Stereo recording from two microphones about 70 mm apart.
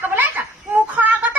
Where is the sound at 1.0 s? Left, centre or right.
Centre.